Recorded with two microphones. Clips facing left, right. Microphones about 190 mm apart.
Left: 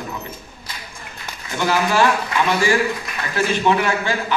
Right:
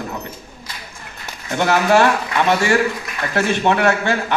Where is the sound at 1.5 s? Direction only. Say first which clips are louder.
Right 4 dB; 60° right (ahead or behind).